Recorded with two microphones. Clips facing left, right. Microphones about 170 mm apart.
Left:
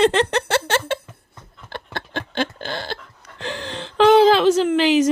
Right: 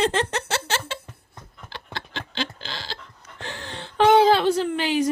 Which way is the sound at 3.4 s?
90° left.